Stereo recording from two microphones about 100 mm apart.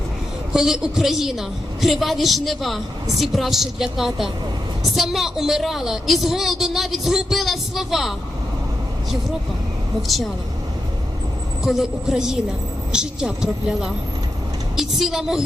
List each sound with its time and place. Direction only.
0.5 s a woman's voice: 5° right (ahead or behind)
11.6 s a woman's voice: 5° right (ahead or behind)